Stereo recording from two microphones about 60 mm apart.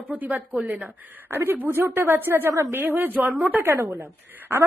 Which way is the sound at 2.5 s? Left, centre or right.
Right.